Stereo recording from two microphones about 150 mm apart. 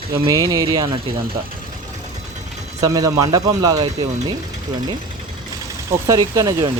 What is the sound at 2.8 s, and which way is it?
Speech, 25° right (ahead or behind).